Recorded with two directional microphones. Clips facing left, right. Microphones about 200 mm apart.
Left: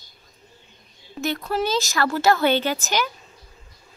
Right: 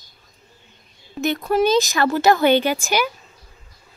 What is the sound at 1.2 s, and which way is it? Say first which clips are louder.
Speech: right 6 dB; 15° right (ahead or behind).